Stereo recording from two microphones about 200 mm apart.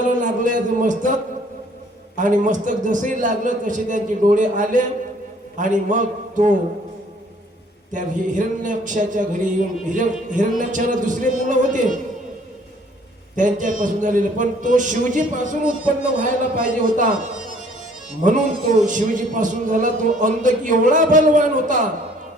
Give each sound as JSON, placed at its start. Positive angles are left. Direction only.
{"t": 0.0, "sound": "a man's voice", "side_deg": -40}
{"t": 7.9, "sound": "a man's voice", "side_deg": -40}
{"t": 13.3, "sound": "a man's voice", "side_deg": -40}